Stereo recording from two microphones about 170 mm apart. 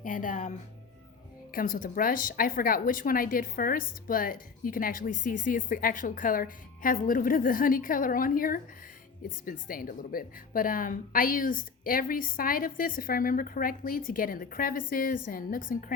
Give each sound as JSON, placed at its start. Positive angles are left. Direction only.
{"t": 0.0, "sound": "speech", "side_deg": 50}
{"t": 1.5, "sound": "a woman's voice", "side_deg": 55}